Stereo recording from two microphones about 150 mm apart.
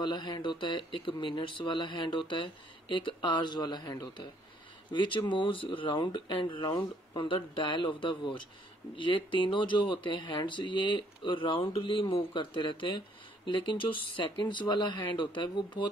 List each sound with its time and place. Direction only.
0.0 s speech: 30° left (ahead or behind)